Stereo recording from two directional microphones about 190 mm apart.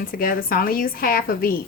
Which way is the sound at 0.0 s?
50° left (ahead or behind).